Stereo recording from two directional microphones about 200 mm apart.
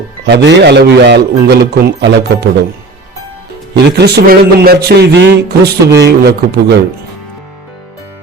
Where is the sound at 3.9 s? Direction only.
55° right (ahead or behind).